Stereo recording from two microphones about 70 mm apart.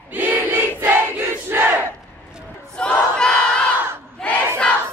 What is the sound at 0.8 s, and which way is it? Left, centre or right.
Battle cry, right.